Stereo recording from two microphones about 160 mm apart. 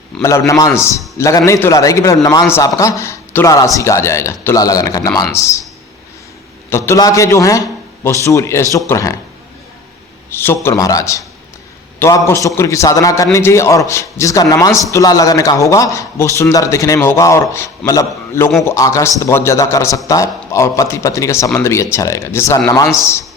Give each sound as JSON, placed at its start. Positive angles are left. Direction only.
{"t": 0.2, "sound": "a man's voice", "side_deg": 20}
{"t": 6.7, "sound": "a man's voice", "side_deg": 15}
{"t": 10.2, "sound": "a man's voice", "side_deg": 15}